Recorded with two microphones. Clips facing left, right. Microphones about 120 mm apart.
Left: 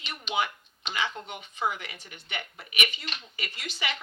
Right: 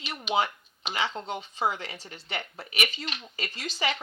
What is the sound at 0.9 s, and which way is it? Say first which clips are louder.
Speech: right 2 dB; 30° right (ahead or behind).